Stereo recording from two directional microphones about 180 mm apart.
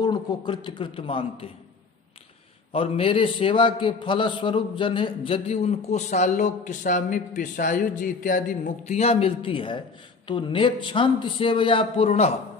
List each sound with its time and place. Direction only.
0.0 s a man's voice: 25° left (ahead or behind)
2.7 s a man's voice: 30° left (ahead or behind)